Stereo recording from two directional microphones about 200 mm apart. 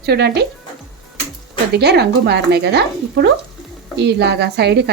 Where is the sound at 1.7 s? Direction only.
55° right (ahead or behind).